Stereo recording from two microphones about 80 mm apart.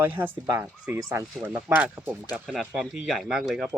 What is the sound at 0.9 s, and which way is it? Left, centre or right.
Speech, right.